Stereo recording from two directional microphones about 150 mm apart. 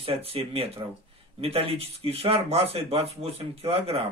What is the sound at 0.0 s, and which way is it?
A man's voice, 40° right (ahead or behind).